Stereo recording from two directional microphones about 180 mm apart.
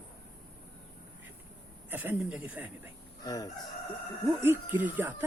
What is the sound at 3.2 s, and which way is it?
Chicken, 20° left (ahead or behind).